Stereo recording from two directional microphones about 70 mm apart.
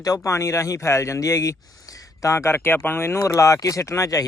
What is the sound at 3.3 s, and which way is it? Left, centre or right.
Speech, left.